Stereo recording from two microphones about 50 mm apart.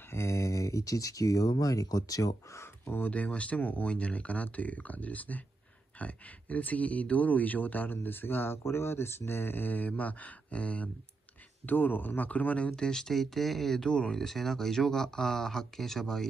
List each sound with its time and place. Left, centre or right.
0.1 s a sound: left
2.8 s speech: left
3.1 s speech: left
11.6 s speech: left
12.7 s speech: centre
13.8 s speech: left
14.1 s speech: centre